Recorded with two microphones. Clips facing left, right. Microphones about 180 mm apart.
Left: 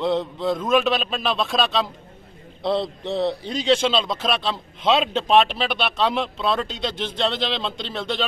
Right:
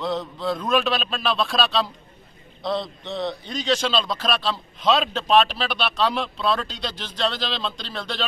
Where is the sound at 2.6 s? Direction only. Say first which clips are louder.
Left 4 dB; 30° left (ahead or behind).